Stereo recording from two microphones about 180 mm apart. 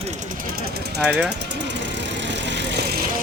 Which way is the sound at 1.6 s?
80° right.